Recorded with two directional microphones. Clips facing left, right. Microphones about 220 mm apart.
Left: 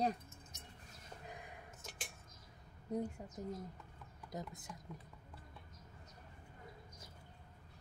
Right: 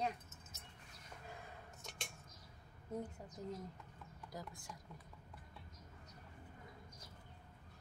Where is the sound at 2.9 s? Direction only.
25° left (ahead or behind).